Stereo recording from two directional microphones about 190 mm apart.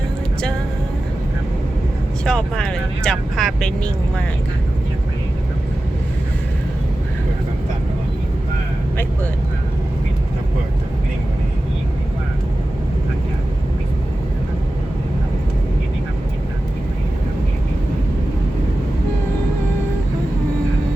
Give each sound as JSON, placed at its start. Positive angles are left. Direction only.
{"t": 2.2, "sound": "speech", "side_deg": 5}